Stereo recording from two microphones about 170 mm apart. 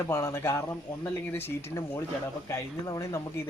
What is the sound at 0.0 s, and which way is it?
Speech, 15° left (ahead or behind).